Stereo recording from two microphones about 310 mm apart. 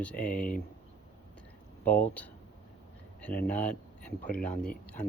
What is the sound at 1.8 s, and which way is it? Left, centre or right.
Speech, centre.